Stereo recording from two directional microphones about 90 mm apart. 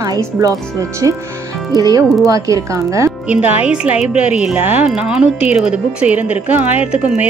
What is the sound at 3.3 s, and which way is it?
A woman's voice, 15° right (ahead or behind).